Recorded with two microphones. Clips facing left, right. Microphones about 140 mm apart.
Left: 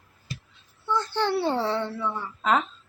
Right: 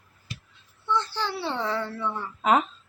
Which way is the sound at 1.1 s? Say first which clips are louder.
Left 6 dB; 55° left (ahead or behind).